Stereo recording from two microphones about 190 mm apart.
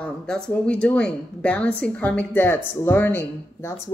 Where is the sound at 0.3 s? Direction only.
5° left (ahead or behind).